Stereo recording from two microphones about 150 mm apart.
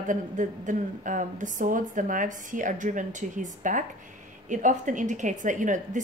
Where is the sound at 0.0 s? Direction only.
55° right (ahead or behind).